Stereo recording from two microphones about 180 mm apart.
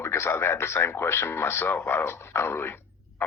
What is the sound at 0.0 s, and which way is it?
Speech, 15° left (ahead or behind).